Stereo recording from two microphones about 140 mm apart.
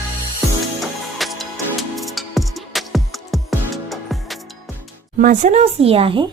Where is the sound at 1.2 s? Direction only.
Centre (ahead or behind).